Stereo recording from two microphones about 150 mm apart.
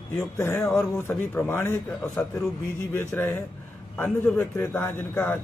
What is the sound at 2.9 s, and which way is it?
A man's voice, 15° left (ahead or behind).